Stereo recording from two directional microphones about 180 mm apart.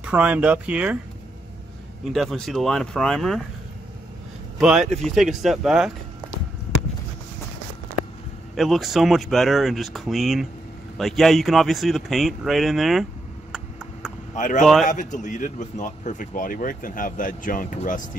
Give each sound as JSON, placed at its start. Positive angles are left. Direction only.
{"t": 0.0, "sound": "speech", "side_deg": -5}
{"t": 2.0, "sound": "speech", "side_deg": 0}
{"t": 4.6, "sound": "a man's voice", "side_deg": 0}
{"t": 8.5, "sound": "speech", "side_deg": 0}
{"t": 13.5, "sound": "a sound", "side_deg": -5}
{"t": 14.3, "sound": "speech", "side_deg": 45}
{"t": 14.6, "sound": "speech", "side_deg": 0}
{"t": 14.9, "sound": "a man's voice", "side_deg": 45}